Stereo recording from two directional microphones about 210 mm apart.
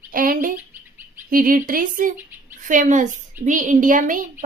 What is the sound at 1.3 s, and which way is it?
A child's voice, 45° right (ahead or behind).